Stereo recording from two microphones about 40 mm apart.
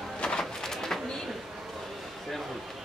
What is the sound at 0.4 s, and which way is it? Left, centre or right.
Pigeon, centre.